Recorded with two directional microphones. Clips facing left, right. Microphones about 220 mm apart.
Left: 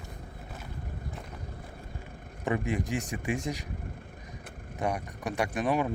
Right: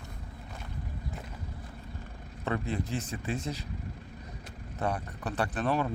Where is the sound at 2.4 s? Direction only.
15° left (ahead or behind).